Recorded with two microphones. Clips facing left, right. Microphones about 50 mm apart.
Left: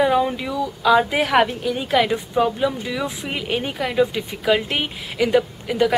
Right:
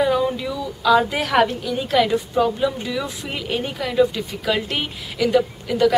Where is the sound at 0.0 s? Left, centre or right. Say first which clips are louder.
Left 1 dB; centre.